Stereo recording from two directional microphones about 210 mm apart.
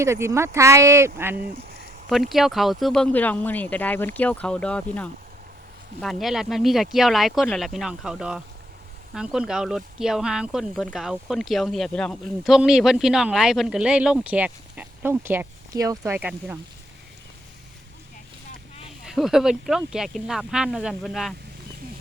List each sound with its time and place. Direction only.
0.0 s speech: 15° right (ahead or behind)
1.4 s a sound: 45° right (ahead or behind)
2.3 s speech: centre (ahead or behind)
19.0 s speech: centre (ahead or behind)